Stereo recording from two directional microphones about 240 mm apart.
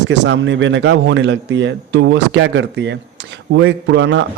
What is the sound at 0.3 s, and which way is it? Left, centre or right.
A man's voice, right.